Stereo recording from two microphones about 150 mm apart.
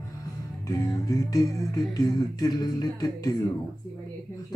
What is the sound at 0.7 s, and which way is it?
Music, 25° left (ahead or behind).